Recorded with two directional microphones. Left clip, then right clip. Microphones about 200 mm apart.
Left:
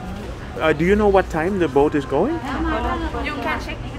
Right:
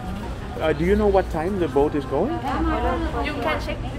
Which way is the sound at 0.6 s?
30° left (ahead or behind).